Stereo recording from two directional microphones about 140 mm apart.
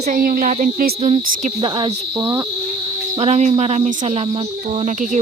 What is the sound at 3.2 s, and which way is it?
Speech, 55° right (ahead or behind).